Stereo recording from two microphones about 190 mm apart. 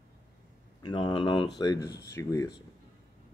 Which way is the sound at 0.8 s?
25° left (ahead or behind).